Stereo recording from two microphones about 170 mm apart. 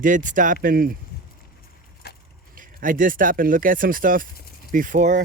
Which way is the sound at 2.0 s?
75° left (ahead or behind).